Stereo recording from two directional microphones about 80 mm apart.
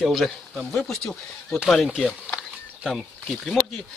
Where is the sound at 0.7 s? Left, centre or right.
Centre.